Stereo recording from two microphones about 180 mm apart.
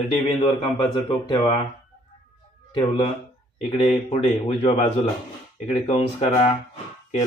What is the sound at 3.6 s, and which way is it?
A man's voice, 30° left (ahead or behind).